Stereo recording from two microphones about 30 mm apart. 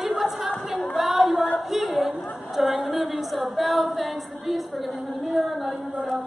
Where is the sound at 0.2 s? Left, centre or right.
Centre.